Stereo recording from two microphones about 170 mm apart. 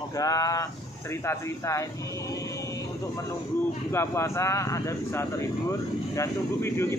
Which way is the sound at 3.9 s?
15° left (ahead or behind).